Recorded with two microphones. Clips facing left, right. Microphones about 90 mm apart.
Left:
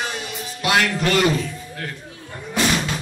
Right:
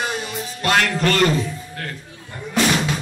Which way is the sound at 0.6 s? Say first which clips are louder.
Right 1 dB; 10° left (ahead or behind).